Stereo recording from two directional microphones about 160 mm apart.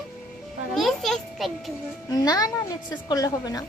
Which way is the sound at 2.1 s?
25° left (ahead or behind).